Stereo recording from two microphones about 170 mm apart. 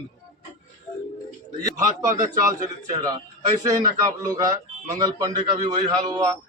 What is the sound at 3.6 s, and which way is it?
A man's voice, 20° right (ahead or behind).